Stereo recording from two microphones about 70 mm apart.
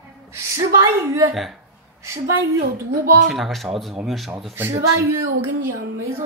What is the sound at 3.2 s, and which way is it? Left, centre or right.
Speech, centre.